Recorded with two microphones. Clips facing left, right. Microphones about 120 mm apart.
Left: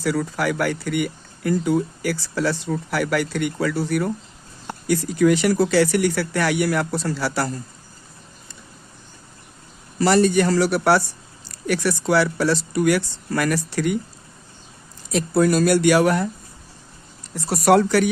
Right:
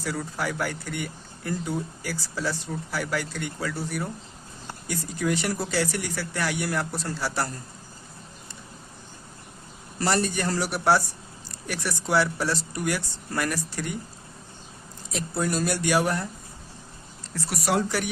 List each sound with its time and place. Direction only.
0.0 s speech: 85° left
10.0 s speech: 90° left
15.1 s speech: 85° left
17.3 s speech: 15° left (ahead or behind)
17.7 s speech: 80° left